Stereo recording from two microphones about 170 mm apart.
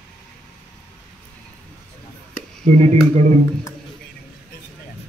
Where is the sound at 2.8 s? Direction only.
40° right (ahead or behind).